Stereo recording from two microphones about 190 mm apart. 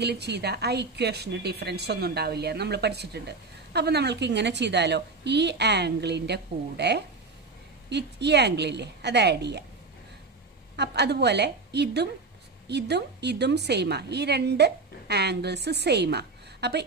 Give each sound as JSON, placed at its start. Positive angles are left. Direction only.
{"t": 0.0, "sound": "a woman's voice", "side_deg": -60}
{"t": 10.8, "sound": "a woman's voice", "side_deg": -60}